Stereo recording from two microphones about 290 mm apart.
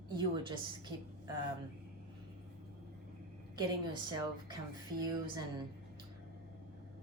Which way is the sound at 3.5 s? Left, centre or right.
Centre.